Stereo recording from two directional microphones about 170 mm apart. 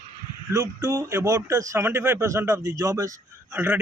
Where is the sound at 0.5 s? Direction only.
20° right (ahead or behind).